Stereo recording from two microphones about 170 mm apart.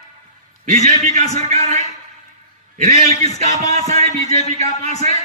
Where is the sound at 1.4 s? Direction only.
40° right (ahead or behind).